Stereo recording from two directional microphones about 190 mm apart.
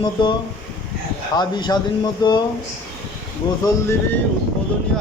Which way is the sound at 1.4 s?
20° left (ahead or behind).